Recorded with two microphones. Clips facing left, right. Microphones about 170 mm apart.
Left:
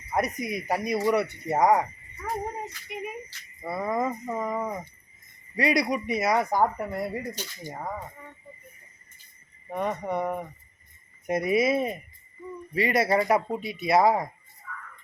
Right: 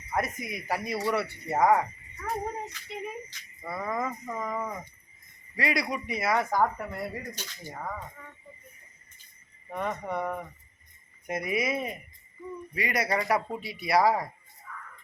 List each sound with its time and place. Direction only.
0.1 s speech: 20° left (ahead or behind)
2.9 s music: 15° left (ahead or behind)
3.7 s speech: 25° left (ahead or behind)
7.2 s speech: 10° left (ahead or behind)
7.7 s speech: 20° left (ahead or behind)
9.6 s speech: 15° left (ahead or behind)